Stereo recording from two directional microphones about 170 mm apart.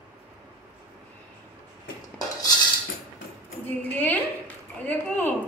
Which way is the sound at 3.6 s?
10° left (ahead or behind).